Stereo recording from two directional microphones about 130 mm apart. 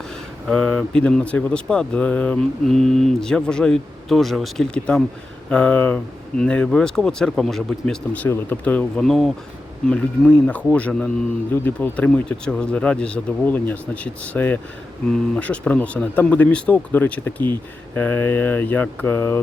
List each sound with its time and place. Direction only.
0.4 s speech: 5° left (ahead or behind)